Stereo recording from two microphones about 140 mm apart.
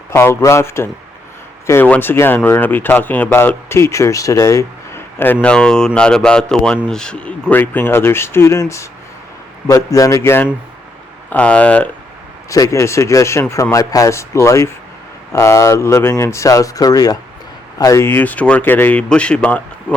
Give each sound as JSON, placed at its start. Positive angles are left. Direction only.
{"t": 0.1, "sound": "speech", "side_deg": 15}
{"t": 12.5, "sound": "speech", "side_deg": 25}